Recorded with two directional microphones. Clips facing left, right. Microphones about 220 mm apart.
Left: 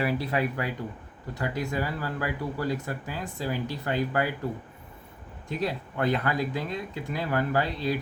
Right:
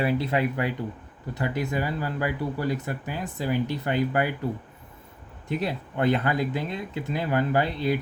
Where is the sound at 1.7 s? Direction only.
20° right (ahead or behind).